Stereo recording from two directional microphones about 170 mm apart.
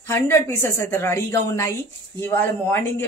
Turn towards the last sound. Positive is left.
turn(degrees=15)  # may be behind; listen again after turning